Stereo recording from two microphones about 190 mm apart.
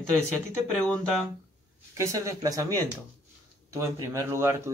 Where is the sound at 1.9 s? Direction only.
15° right (ahead or behind).